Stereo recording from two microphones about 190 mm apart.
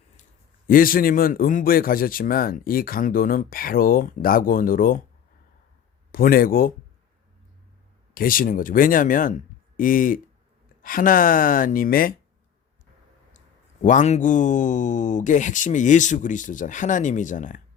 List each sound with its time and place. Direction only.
0.7 s a man's voice: 50° left (ahead or behind)
6.1 s a man's voice: 50° left (ahead or behind)
8.1 s a man's voice: 45° left (ahead or behind)
13.8 s speech: 40° left (ahead or behind)